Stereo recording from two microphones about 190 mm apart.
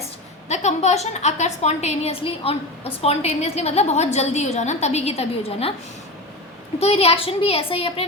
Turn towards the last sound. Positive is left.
turn(degrees=30)  # may be behind; listen again after turning